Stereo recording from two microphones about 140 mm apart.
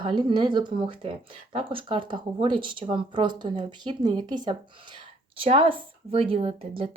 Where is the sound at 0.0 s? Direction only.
35° right (ahead or behind).